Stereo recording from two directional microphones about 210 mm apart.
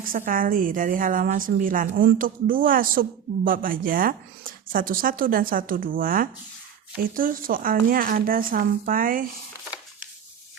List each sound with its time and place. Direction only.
0.0 s a woman's voice: 40° right (ahead or behind)